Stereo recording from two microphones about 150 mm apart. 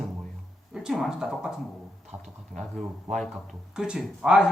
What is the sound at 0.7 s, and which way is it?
Speech, 5° right (ahead or behind).